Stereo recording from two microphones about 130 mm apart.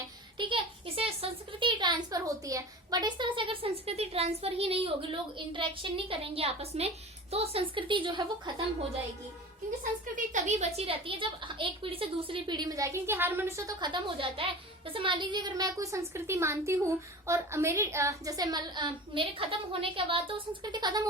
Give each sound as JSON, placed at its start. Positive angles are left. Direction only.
{"t": 0.3, "sound": "speech", "side_deg": -40}
{"t": 10.3, "sound": "a woman's voice", "side_deg": -65}
{"t": 13.7, "sound": "a woman's voice", "side_deg": -35}